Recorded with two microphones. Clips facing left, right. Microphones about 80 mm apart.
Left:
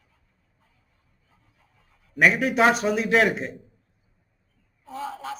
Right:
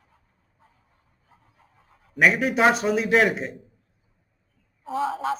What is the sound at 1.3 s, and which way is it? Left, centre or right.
Dog, right.